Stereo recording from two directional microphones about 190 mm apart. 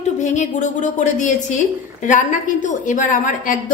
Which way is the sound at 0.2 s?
40° left (ahead or behind).